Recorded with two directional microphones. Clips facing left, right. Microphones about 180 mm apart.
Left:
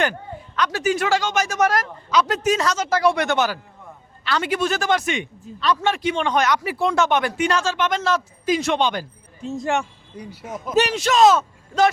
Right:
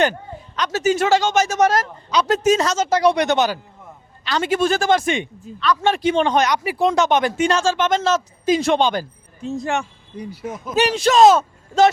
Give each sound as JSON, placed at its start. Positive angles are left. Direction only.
{"t": 0.0, "sound": "speech", "side_deg": -20}
{"t": 10.8, "sound": "speech", "side_deg": -30}